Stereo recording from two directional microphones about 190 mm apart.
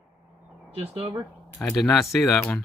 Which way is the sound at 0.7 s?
30° right (ahead or behind).